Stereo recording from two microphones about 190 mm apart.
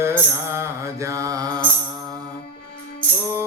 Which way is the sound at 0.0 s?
15° right (ahead or behind).